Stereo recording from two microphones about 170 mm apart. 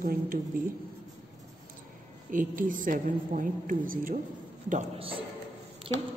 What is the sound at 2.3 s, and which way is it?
A woman's voice, 50° right (ahead or behind).